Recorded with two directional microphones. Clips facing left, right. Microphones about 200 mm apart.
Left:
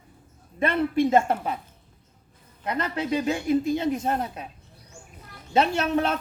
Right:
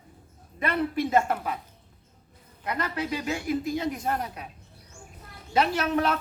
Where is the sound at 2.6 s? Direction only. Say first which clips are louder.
Left 2 dB; 25° left (ahead or behind).